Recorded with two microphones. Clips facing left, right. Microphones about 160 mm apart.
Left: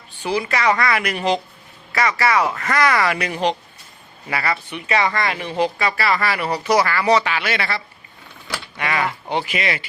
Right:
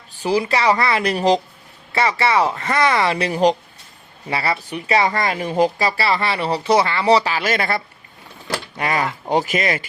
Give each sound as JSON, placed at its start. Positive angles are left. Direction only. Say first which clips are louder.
{"t": 0.1, "sound": "speech", "louder": "right 3 dB", "side_deg": -40}
{"t": 8.8, "sound": "speech", "louder": "right 1 dB", "side_deg": -40}